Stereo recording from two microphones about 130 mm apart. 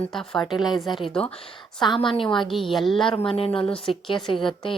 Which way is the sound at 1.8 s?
40° left (ahead or behind).